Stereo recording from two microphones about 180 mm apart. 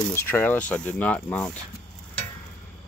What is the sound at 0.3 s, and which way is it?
Speech, 10° left (ahead or behind).